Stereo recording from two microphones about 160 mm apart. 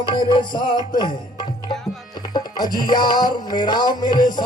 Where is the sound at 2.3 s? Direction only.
25° left (ahead or behind).